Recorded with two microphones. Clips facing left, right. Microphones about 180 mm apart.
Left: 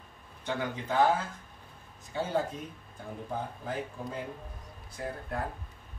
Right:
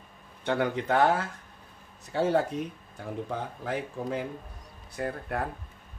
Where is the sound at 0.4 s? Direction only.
65° right (ahead or behind).